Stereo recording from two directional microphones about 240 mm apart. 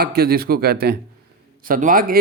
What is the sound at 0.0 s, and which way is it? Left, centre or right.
Speech, right.